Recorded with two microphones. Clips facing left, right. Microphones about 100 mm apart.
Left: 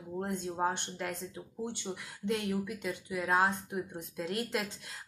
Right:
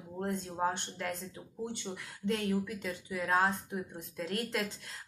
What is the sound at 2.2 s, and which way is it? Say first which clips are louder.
A woman's voice: right 1 dB; 5° left (ahead or behind).